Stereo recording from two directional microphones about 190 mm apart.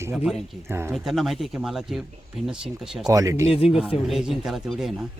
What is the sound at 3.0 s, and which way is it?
Speech, 15° right (ahead or behind).